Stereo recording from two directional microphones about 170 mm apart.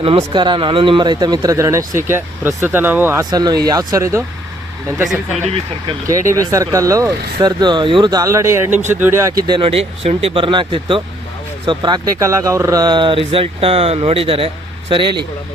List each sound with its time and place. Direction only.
0.0 s speech: 30° right (ahead or behind); by 3.2 s 15° right (ahead or behind)
3.2 s speech: 25° right (ahead or behind)
6.1 s speech: 20° right (ahead or behind)
9.5 s speech: 30° right (ahead or behind)